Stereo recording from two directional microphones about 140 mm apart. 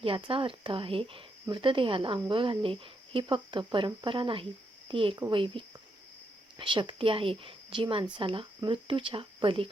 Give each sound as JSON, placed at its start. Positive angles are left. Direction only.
{"t": 0.0, "sound": "speech", "side_deg": -40}